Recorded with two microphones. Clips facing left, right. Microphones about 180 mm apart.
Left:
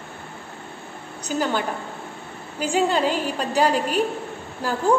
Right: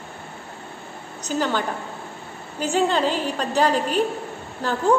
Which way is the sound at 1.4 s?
10° left (ahead or behind).